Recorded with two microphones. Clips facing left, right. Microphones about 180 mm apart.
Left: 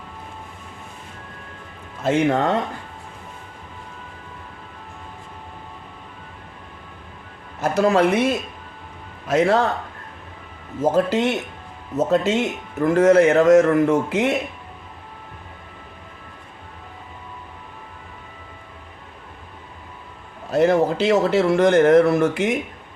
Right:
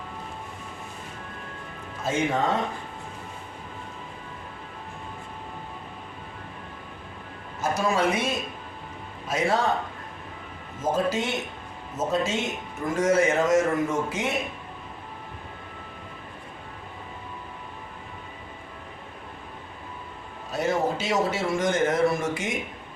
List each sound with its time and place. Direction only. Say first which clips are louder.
2.0 s a man's voice: left 6 dB; 65° left (ahead or behind)
7.6 s a man's voice: left 7 dB; 65° left (ahead or behind)
10.8 s a man's voice: left 7 dB; 65° left (ahead or behind)
20.5 s a man's voice: left 8 dB; 60° left (ahead or behind)